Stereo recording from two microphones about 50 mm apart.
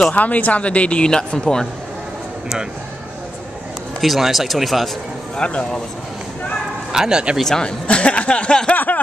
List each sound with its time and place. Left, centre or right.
0.1 s speech: left; by 1.7 s centre
4.0 s speech: centre
5.4 s speech: centre
6.9 s speech: centre
7.4 s speech: centre
7.8 s speech: left
8.7 s snicker: left